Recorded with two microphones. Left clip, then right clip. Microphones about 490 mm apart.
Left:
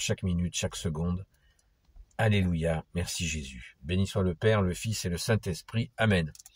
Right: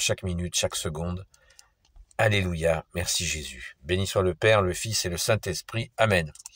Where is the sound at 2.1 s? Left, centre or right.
Left.